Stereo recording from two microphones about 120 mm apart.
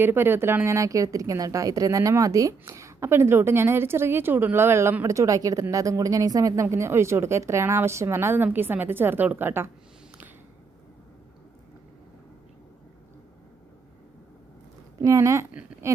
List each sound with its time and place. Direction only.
0.0 s a woman's voice: 20° right (ahead or behind)
15.0 s speech: 25° right (ahead or behind)